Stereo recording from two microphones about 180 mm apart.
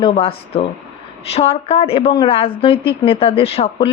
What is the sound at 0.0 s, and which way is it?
A woman's voice, 30° left (ahead or behind).